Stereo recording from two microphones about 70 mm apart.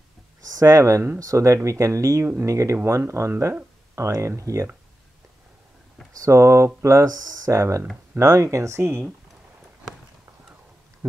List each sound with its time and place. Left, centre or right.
0.5 s speech: right
6.1 s speech: right